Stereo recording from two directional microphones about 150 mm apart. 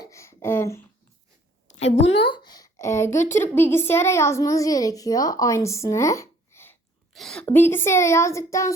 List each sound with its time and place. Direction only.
0.0 s a sound: 20° left (ahead or behind)
1.6 s a woman's voice: 45° left (ahead or behind); by 6.7 s 15° left (ahead or behind)
7.1 s a woman's voice: centre (ahead or behind)
7.4 s speech: 15° left (ahead or behind)